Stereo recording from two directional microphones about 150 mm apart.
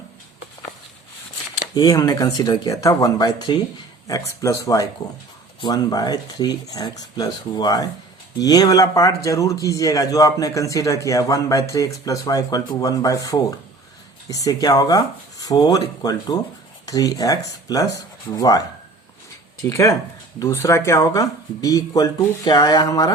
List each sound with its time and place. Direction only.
1.7 s speech: 25° left (ahead or behind)
19.6 s speech: 20° left (ahead or behind)